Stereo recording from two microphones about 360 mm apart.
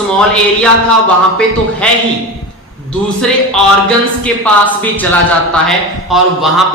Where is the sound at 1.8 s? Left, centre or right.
Centre.